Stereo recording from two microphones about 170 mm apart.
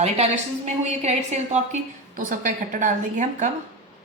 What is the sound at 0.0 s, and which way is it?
A woman's voice, 40° right (ahead or behind).